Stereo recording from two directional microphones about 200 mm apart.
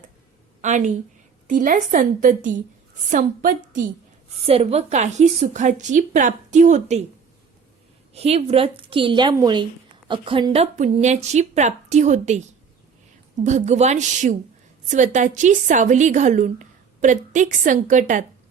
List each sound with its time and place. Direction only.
0.6 s a woman's voice: 35° right (ahead or behind)
8.1 s a woman's voice: 30° right (ahead or behind)